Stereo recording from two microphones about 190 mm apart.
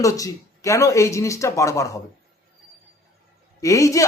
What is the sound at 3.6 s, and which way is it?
Speech, 15° left (ahead or behind).